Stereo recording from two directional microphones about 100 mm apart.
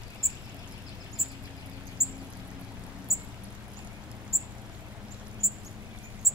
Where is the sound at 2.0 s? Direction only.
35° right (ahead or behind).